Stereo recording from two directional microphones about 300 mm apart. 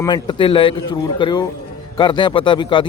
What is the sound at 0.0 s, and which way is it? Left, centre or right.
A man's voice, centre.